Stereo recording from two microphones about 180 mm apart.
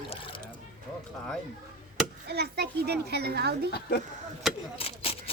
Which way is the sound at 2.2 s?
60° right (ahead or behind).